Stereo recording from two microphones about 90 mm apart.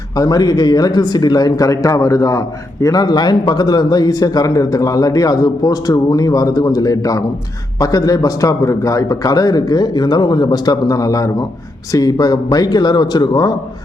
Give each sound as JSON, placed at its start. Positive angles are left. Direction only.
{"t": 0.2, "sound": "speech", "side_deg": 45}